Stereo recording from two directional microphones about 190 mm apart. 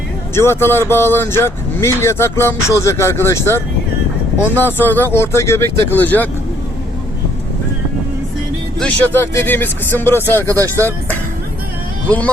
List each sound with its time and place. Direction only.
0.3 s speech: 10° left (ahead or behind)
8.8 s speech: 10° left (ahead or behind)
10.5 s speech: 15° right (ahead or behind)
12.0 s speech: 10° left (ahead or behind)